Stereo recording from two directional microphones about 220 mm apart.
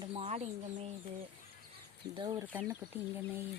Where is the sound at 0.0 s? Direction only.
30° right (ahead or behind).